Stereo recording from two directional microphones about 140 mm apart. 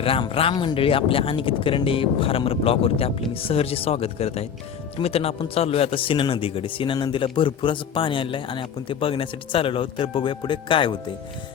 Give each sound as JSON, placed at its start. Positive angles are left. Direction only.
{"t": 0.0, "sound": "speech", "side_deg": 40}